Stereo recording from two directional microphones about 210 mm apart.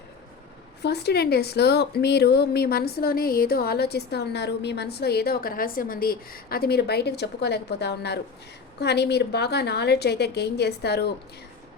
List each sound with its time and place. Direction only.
0.8 s a woman's voice: 50° left (ahead or behind)